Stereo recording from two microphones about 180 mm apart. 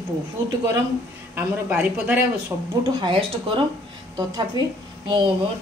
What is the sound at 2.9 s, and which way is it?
A woman's voice, 25° right (ahead or behind).